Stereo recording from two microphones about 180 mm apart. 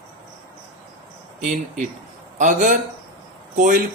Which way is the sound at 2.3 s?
45° right (ahead or behind).